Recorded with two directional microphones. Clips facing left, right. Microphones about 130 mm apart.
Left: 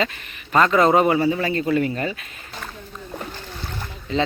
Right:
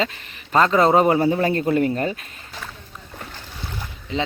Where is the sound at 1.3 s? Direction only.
45° right (ahead or behind).